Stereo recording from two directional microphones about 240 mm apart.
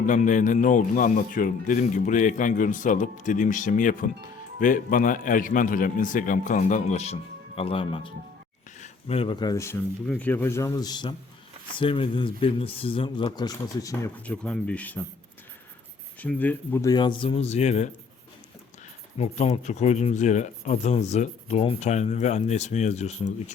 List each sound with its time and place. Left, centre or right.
0.0 s speech: left; by 15.0 s centre
16.2 s speech: centre; by 17.9 s left
19.2 s speech: left